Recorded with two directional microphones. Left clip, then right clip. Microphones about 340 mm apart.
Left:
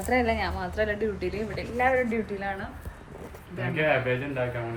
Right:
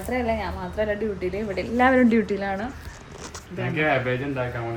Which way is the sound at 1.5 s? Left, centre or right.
Right.